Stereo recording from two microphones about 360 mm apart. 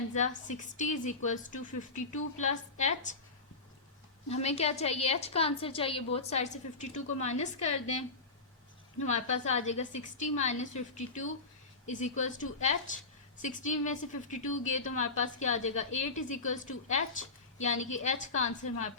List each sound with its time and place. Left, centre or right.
0.1 s a woman's voice: centre
4.3 s a woman's voice: centre
9.0 s a woman's voice: centre